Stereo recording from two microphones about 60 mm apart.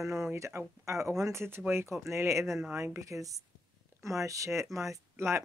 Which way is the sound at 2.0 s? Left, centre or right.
Right.